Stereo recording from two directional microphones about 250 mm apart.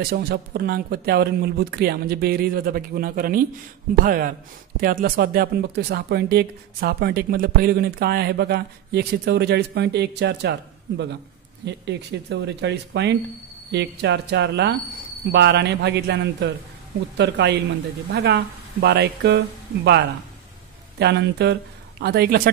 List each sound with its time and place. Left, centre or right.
0.0 s speech: right
11.6 s speech: right
21.0 s speech: right